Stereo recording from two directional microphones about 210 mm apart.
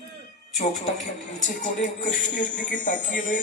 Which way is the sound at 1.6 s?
35° left (ahead or behind).